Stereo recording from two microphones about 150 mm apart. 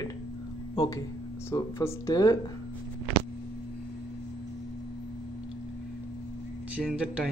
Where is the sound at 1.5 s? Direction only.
20° left (ahead or behind).